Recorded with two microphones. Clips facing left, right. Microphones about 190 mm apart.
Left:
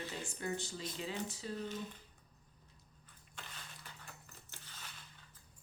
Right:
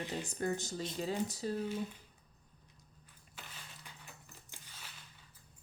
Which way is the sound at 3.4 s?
5° right (ahead or behind).